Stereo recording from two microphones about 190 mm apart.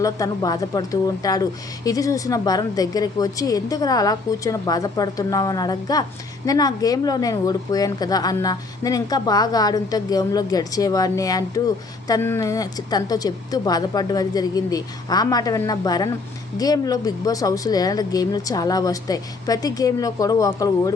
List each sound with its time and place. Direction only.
0.0 s speech: 20° left (ahead or behind)